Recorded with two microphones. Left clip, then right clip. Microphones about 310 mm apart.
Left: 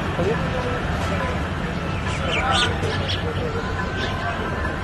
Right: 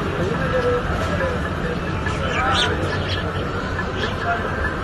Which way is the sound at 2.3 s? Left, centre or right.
Left.